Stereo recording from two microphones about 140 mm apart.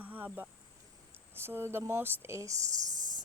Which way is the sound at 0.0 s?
10° right (ahead or behind).